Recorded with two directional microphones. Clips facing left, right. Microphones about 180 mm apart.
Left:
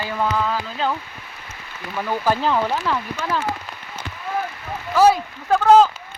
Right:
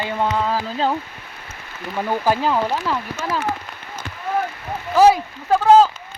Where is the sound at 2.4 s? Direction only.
5° right (ahead or behind).